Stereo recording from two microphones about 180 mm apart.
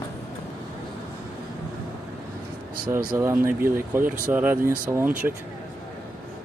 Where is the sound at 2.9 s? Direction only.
20° right (ahead or behind).